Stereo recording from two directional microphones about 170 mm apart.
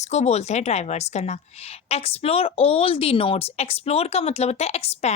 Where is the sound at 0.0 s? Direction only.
40° left (ahead or behind).